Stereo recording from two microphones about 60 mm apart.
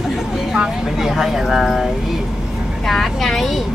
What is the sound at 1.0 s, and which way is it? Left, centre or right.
Speech, centre.